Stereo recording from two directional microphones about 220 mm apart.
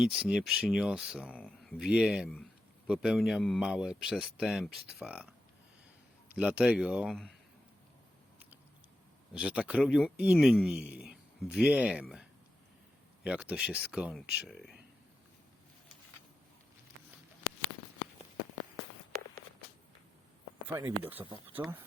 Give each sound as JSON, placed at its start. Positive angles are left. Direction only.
{"t": 0.0, "sound": "a man's voice", "side_deg": -5}
{"t": 9.3, "sound": "a man's voice", "side_deg": -5}
{"t": 13.2, "sound": "a man's voice", "side_deg": -5}
{"t": 20.7, "sound": "speech", "side_deg": -10}
{"t": 21.2, "sound": "speech", "side_deg": -25}
{"t": 21.5, "sound": "speech", "side_deg": -10}